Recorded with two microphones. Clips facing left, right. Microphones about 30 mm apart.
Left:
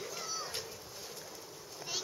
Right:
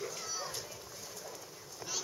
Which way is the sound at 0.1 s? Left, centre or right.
Centre.